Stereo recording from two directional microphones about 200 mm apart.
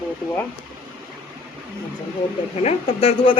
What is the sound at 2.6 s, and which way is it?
Speech, 30° left (ahead or behind).